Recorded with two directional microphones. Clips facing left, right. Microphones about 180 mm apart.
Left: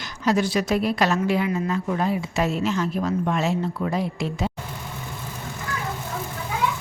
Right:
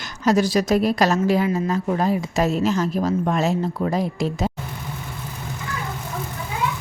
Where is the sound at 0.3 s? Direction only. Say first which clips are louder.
Right 3 dB; 40° right (ahead or behind).